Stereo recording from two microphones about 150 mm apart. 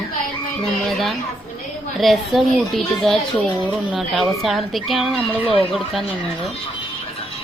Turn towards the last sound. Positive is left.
turn(degrees=0)  # may be behind; listen again after turning